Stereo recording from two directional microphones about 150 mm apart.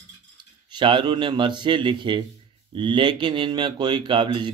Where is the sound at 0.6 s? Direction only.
30° right (ahead or behind).